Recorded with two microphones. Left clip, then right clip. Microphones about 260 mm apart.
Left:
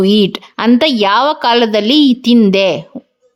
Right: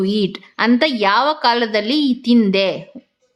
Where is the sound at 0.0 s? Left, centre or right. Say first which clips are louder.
Left 8 dB; left.